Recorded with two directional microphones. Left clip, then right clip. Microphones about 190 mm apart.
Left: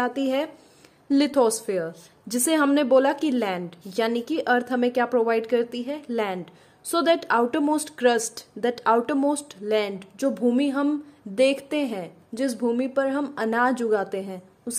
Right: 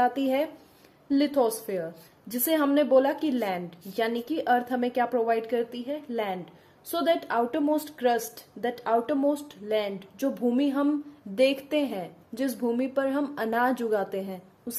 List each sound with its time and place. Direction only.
0.0 s a woman's voice: 20° left (ahead or behind)